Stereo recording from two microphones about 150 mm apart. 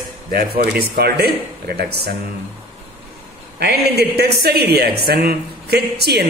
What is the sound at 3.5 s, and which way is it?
A woman's voice, 90° right.